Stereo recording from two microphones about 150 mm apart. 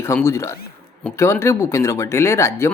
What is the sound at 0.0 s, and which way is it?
Speech, 15° left (ahead or behind).